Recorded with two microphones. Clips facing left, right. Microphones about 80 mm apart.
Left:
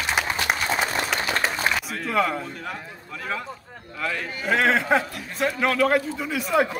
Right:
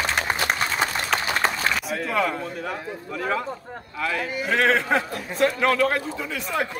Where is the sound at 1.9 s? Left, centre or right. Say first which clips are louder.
Even; centre.